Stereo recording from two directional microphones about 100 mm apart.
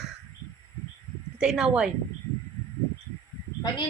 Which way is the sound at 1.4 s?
5° right (ahead or behind).